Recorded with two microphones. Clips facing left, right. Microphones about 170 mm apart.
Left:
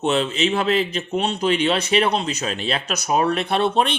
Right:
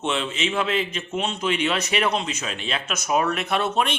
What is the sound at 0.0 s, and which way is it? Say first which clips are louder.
A man's voice: left 6 dB; 35° left (ahead or behind).